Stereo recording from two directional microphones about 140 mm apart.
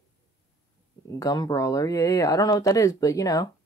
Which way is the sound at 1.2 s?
25° left (ahead or behind).